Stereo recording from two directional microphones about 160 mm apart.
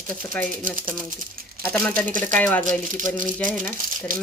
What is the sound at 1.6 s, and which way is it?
Speech, 10° left (ahead or behind).